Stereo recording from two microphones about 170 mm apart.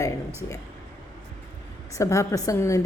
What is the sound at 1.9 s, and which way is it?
Speech, 15° left (ahead or behind).